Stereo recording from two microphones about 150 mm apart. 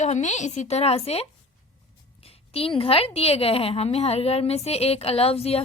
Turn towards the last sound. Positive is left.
turn(degrees=40)  # may be behind; listen again after turning